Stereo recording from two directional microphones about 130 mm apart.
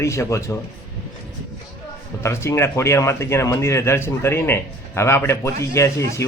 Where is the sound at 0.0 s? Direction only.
20° left (ahead or behind).